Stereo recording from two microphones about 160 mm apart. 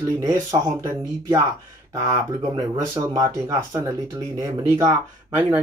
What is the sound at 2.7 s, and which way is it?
Speech, 20° right (ahead or behind).